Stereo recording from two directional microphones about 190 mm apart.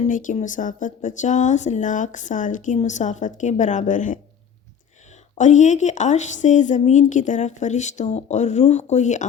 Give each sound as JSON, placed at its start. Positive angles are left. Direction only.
{"t": 0.0, "sound": "speech", "side_deg": 40}
{"t": 5.4, "sound": "speech", "side_deg": 40}